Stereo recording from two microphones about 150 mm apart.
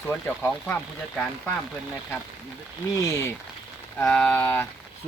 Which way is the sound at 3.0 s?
20° left (ahead or behind).